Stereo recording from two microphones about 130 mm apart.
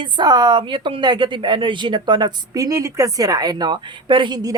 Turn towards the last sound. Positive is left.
turn(degrees=-30)  # may be behind; listen again after turning